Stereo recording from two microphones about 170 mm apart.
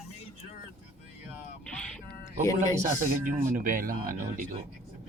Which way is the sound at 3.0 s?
50° right (ahead or behind).